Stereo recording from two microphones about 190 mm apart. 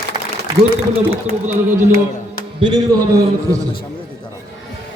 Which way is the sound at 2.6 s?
20° right (ahead or behind).